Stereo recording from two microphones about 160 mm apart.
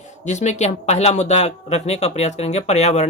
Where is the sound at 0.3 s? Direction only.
45° left (ahead or behind).